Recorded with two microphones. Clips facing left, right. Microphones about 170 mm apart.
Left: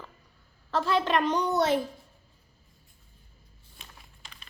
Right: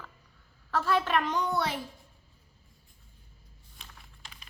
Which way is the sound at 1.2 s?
20° left (ahead or behind).